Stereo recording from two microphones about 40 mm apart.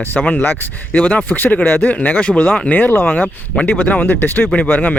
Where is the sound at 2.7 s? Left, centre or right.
Left.